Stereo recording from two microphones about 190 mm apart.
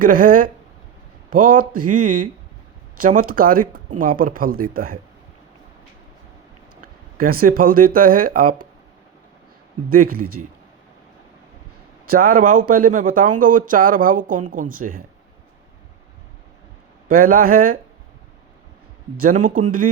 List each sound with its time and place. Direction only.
0.0 s speech: 45° right (ahead or behind)
6.8 s speech: 50° right (ahead or behind)
9.9 s speech: 50° right (ahead or behind)
12.0 s speech: 50° right (ahead or behind)
17.1 s speech: 50° right (ahead or behind)
19.2 s speech: 40° right (ahead or behind)